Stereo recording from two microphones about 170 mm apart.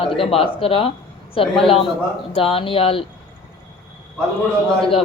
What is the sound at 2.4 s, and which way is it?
Speech, 35° left (ahead or behind).